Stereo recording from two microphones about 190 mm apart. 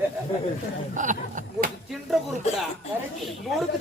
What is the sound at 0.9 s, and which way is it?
Speech, 40° right (ahead or behind).